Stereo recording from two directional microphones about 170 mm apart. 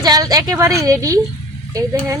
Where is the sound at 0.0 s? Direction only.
20° right (ahead or behind).